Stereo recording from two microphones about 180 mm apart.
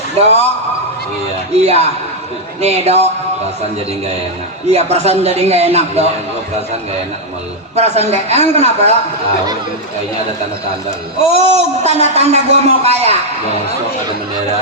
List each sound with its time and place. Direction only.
0.2 s a man's voice: 35° right (ahead or behind)
1.6 s a man's voice: 35° right (ahead or behind)
4.7 s a man's voice: 35° right (ahead or behind)
7.8 s a man's voice: 35° right (ahead or behind)
11.3 s a man's voice: 35° right (ahead or behind)